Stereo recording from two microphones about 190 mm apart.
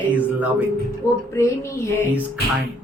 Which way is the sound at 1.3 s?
15° left (ahead or behind).